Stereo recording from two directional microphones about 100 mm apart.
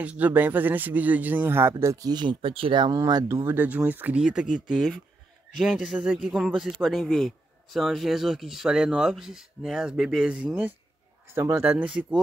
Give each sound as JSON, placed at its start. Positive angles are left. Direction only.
{"t": 0.0, "sound": "speech", "side_deg": -15}
{"t": 2.0, "sound": "speech", "side_deg": -50}
{"t": 2.9, "sound": "speech", "side_deg": -40}
{"t": 3.4, "sound": "speech", "side_deg": -15}
{"t": 4.2, "sound": "a man's voice", "side_deg": -5}
{"t": 11.2, "sound": "speech", "side_deg": -25}
{"t": 11.6, "sound": "speech", "side_deg": -10}